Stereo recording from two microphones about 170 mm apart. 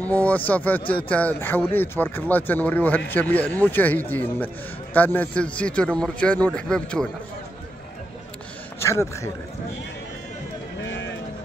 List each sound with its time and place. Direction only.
0.0 s a man's voice: 10° left (ahead or behind)
8.7 s a man's voice: 15° left (ahead or behind)
10.9 s vehicle: 90° left